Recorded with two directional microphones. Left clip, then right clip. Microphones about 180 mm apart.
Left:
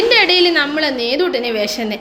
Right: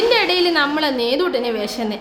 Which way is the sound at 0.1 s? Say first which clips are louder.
Left 4 dB; centre (ahead or behind).